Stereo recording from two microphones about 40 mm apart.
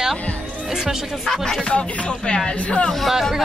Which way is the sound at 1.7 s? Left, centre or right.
Left.